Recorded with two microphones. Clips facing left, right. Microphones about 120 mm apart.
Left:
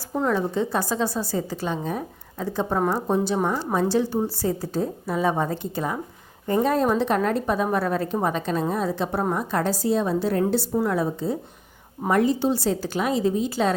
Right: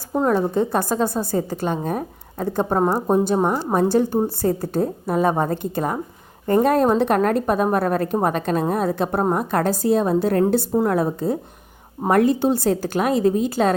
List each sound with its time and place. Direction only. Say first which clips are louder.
0.3 s a woman's voice: right 4 dB; 45° right (ahead or behind)